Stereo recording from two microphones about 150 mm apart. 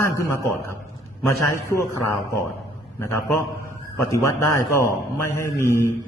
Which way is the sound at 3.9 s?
20° left (ahead or behind).